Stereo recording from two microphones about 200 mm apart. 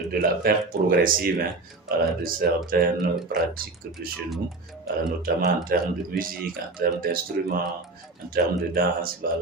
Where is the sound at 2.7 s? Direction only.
45° right (ahead or behind).